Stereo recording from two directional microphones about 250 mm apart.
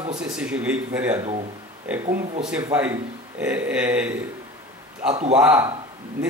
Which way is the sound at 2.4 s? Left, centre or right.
Centre.